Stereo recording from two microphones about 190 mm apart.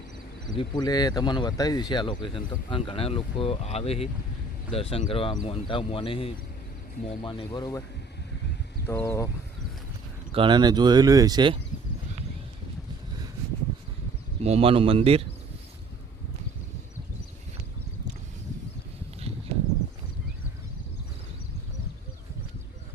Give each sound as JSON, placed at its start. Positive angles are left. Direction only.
{"t": 0.6, "sound": "speech", "side_deg": 20}
{"t": 8.9, "sound": "speech", "side_deg": 15}
{"t": 10.3, "sound": "speech", "side_deg": -25}
{"t": 14.4, "sound": "speech", "side_deg": -30}